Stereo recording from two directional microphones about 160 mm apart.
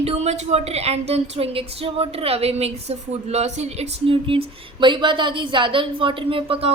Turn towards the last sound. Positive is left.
turn(degrees=-35)  # may be behind; listen again after turning